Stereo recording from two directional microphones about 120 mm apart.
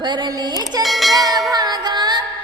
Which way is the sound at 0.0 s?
40° right (ahead or behind).